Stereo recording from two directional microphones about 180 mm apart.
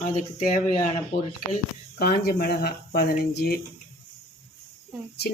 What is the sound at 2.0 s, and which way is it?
Speech, 60° left (ahead or behind).